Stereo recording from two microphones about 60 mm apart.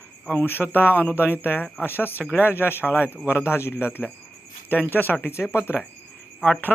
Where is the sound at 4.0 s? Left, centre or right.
Left.